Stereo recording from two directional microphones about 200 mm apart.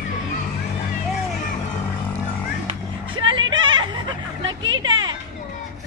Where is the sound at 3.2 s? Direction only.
25° right (ahead or behind).